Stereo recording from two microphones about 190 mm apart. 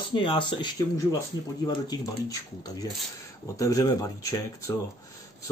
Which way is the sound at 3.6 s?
15° left (ahead or behind).